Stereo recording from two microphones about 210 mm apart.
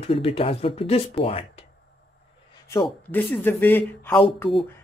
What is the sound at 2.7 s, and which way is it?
Speech, 10° left (ahead or behind).